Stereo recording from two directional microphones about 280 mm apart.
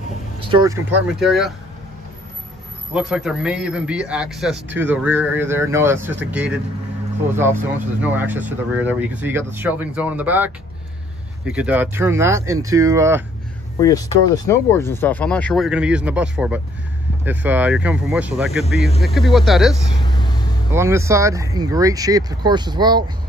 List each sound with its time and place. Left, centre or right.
0.5 s speech: centre
2.9 s a man's voice: centre
8.0 s a man's voice: centre
13.7 s a man's voice: centre
20.0 s vehicle: centre
20.7 s speech: centre